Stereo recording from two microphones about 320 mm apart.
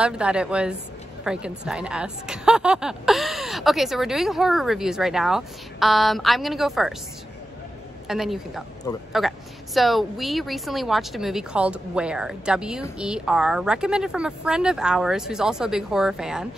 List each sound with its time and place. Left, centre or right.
0.0 s a woman's voice: centre
8.1 s a woman's voice: centre
8.9 s speech: centre
9.8 s a woman's voice: centre